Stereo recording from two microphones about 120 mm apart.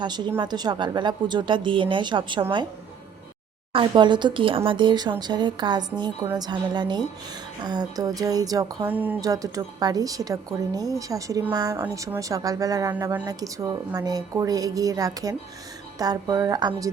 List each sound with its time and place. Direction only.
0.3 s speech: 35° right (ahead or behind)
3.7 s speech: 45° right (ahead or behind)
8.9 s speech: 15° right (ahead or behind)
9.2 s speech: 30° right (ahead or behind)